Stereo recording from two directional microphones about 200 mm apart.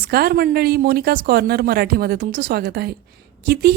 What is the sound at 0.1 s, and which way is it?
A woman's voice, 50° right (ahead or behind).